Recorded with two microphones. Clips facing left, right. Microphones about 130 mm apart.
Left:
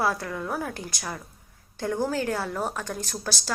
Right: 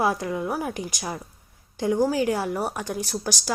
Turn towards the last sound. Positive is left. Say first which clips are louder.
# right 4 dB
turn(degrees=-15)  # may be behind; listen again after turning